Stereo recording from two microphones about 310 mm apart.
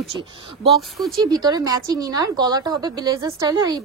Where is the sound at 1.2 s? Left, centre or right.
Centre.